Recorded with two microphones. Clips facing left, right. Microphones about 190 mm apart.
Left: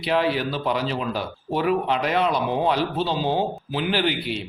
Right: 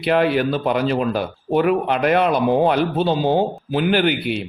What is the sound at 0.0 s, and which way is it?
Speech, 55° right (ahead or behind).